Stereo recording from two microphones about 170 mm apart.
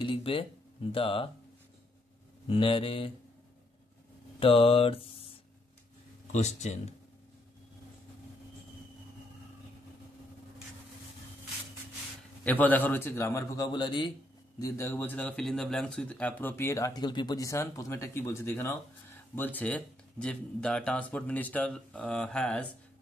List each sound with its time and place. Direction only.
0.0 s mantra: 30° left (ahead or behind)
2.4 s mantra: 30° left (ahead or behind)
4.4 s a sound: 30° left (ahead or behind)
6.3 s mantra: 40° left (ahead or behind)
12.4 s a man's voice: 10° left (ahead or behind); by 14.1 s 25° left (ahead or behind)
14.6 s a man's voice: 15° left (ahead or behind)